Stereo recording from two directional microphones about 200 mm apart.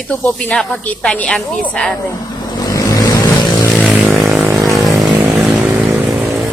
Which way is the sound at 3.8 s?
5° right (ahead or behind).